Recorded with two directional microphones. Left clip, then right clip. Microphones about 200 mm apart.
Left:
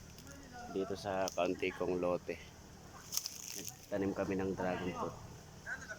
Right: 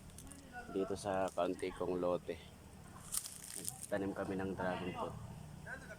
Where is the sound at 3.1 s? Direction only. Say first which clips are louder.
Left 6 dB; 10° left (ahead or behind).